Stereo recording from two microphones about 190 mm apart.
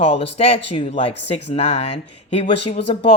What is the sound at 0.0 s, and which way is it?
Speech, 30° left (ahead or behind).